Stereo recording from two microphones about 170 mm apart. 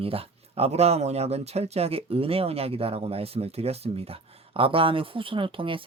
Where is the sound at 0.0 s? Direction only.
35° right (ahead or behind).